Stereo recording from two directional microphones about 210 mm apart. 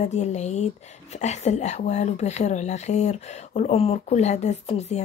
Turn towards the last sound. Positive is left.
turn(degrees=30)  # may be behind; listen again after turning